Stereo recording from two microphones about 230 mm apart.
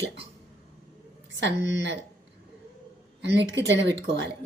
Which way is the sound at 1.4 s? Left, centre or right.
Right.